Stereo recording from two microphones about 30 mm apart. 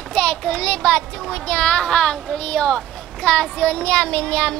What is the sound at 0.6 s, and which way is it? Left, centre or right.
A child's voice, left.